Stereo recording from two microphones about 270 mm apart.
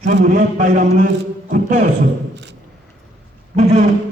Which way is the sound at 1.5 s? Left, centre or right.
Right.